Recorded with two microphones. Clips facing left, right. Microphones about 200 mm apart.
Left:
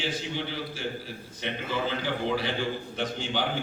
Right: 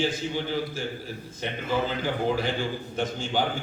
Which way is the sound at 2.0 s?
45° right (ahead or behind).